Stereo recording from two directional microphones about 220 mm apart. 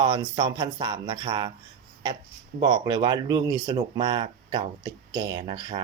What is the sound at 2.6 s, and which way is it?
Speech, 20° right (ahead or behind).